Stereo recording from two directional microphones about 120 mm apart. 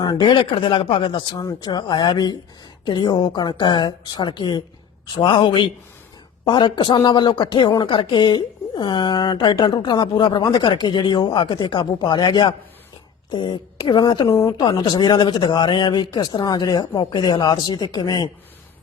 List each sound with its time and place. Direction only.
0.0 s speech: 35° left (ahead or behind)